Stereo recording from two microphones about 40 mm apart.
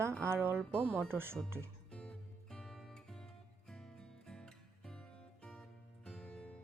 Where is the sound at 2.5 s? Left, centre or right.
Centre.